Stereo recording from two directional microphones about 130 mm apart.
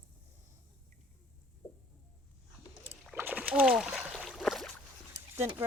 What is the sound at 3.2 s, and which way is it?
Splash, 15° right (ahead or behind).